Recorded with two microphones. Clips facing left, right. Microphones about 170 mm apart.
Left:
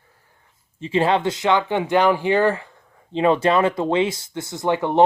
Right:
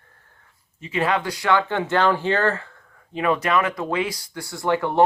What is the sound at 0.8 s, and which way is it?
Speech, 30° left (ahead or behind).